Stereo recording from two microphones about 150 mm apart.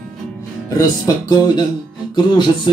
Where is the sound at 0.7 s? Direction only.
25° left (ahead or behind).